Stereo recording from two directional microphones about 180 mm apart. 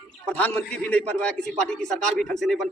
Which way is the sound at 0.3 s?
10° left (ahead or behind).